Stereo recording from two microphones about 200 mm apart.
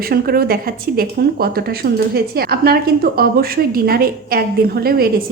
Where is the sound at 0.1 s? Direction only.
50° right (ahead or behind).